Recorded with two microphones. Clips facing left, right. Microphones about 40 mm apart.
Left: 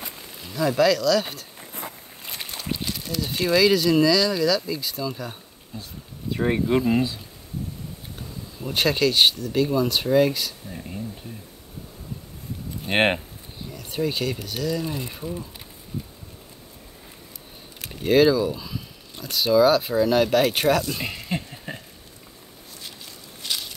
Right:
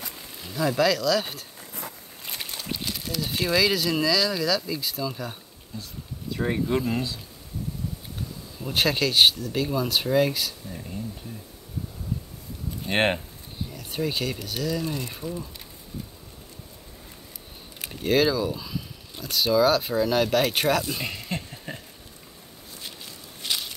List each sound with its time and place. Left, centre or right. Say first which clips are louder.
0.1 s speech: left 1 dB; centre
1.6 s a sound: left 2 dB; left
2.2 s boat: even; centre
2.7 s speech: left 3 dB; centre
5.7 s speech: even; left
8.2 s speech: left 2 dB; centre
10.7 s speech: left 1 dB; centre
12.8 s speech: left 3 dB; centre
13.7 s speech: left 3 dB; centre
18.0 s speech: left 4 dB; centre
20.9 s a sound: left 2 dB; centre
23.4 s a sound: even; right